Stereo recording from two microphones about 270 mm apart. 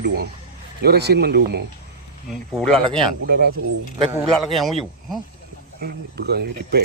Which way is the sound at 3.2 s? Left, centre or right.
Right.